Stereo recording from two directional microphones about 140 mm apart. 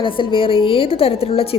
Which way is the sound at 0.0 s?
35° left (ahead or behind).